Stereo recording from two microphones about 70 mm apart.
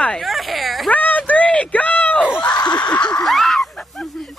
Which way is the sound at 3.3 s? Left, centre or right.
Centre.